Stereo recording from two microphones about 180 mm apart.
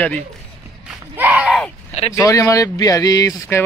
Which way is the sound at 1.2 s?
10° right (ahead or behind).